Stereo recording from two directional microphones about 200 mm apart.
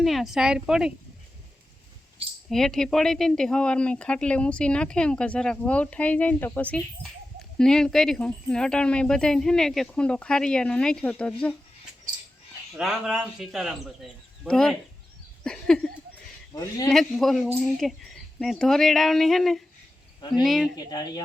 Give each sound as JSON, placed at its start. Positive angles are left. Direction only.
{"t": 0.0, "sound": "speech", "side_deg": 0}
{"t": 2.5, "sound": "speech", "side_deg": 0}
{"t": 12.7, "sound": "speech", "side_deg": -5}
{"t": 16.6, "sound": "speech", "side_deg": 20}
{"t": 16.9, "sound": "speech", "side_deg": 0}
{"t": 20.7, "sound": "speech", "side_deg": 20}